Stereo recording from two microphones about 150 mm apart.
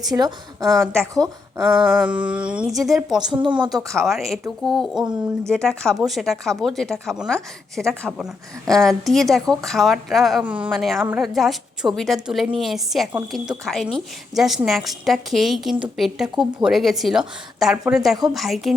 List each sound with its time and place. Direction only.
0.1 s a woman's voice: 25° right (ahead or behind)
1.5 s speech: 5° right (ahead or behind)
3.2 s a woman's voice: 30° right (ahead or behind)
3.8 s a woman's voice: centre (ahead or behind)